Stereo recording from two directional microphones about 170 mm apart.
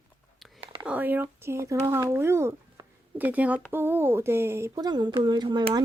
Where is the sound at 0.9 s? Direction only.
10° right (ahead or behind).